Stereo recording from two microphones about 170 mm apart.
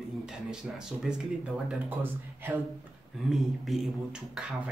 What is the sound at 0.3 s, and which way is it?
Speech, 5° right (ahead or behind).